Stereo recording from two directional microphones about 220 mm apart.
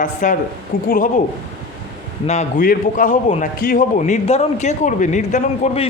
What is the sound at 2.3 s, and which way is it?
A man's voice, 35° left (ahead or behind).